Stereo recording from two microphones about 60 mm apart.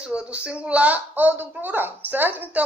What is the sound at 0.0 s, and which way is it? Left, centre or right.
A woman's voice, centre.